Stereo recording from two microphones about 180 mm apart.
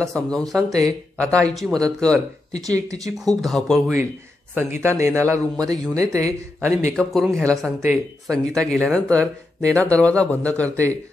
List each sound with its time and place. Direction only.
0.0 s speech: 5° left (ahead or behind)
2.6 s speech: 20° right (ahead or behind)
3.3 s speech: centre (ahead or behind)
4.6 s a man's voice: 15° right (ahead or behind)
6.9 s speech: centre (ahead or behind)